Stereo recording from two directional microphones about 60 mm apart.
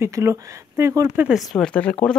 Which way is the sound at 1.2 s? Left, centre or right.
Right.